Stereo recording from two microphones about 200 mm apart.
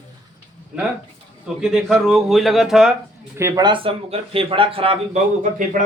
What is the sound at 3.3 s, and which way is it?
Speech, 15° right (ahead or behind).